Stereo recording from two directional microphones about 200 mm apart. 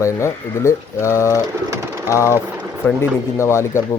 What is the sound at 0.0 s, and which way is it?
Speech, 15° left (ahead or behind).